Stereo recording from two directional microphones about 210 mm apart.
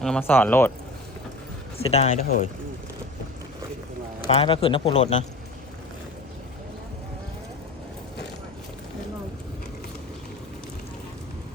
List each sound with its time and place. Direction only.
0.0 s speech: 5° left (ahead or behind)
1.8 s speech: 30° left (ahead or behind)
4.3 s speech: 25° left (ahead or behind)